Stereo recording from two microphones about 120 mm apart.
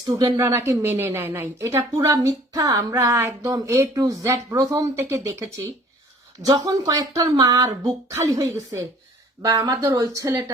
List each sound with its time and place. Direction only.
0.0 s a woman's voice: 35° right (ahead or behind)